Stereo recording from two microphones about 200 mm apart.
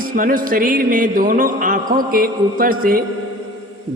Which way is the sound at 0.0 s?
45° right (ahead or behind).